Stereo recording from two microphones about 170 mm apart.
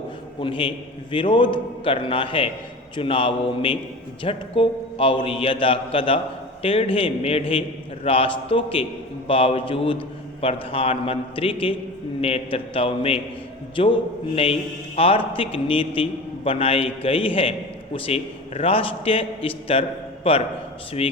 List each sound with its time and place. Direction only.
0.4 s a man's voice: 30° left (ahead or behind)